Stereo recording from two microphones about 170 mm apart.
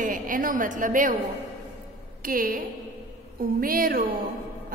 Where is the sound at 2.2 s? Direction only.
55° right (ahead or behind).